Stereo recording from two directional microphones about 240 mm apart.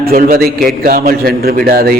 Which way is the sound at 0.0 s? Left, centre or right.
Right.